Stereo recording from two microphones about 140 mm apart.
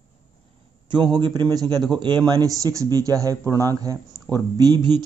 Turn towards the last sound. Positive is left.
turn(degrees=-30)  # may be behind; listen again after turning